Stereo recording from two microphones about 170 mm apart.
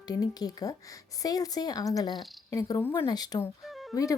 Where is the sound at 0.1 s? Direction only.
20° left (ahead or behind).